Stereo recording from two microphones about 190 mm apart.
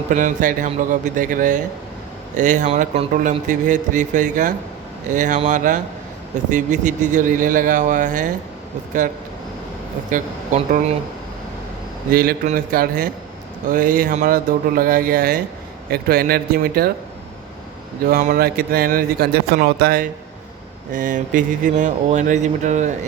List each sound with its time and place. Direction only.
0.1 s speech: 40° right (ahead or behind)
10.1 s speech: 45° right (ahead or behind)
12.1 s speech: 50° right (ahead or behind)
18.1 s speech: 45° right (ahead or behind)